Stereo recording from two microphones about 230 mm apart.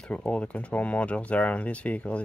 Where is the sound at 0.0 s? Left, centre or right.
Centre.